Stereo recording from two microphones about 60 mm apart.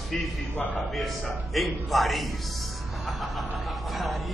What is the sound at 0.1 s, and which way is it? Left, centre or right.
Speech, centre.